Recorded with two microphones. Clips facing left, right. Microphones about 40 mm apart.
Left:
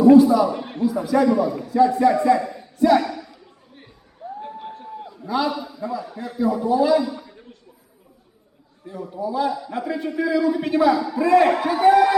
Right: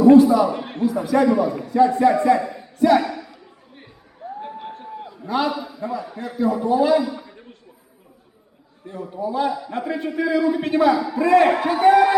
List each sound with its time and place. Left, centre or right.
0.0 s a man's voice: centre
0.9 s a man's voice: centre
4.2 s music: centre
4.8 s a sound: centre
5.2 s a man's voice: right
5.5 s a man's voice: centre
7.0 s a sound: centre
8.9 s a man's voice: right